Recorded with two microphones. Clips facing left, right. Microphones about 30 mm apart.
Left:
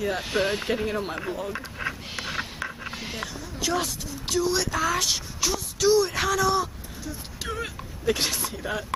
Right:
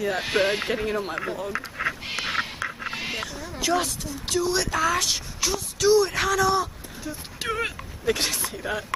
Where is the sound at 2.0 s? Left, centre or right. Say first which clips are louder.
Right 5 dB; right.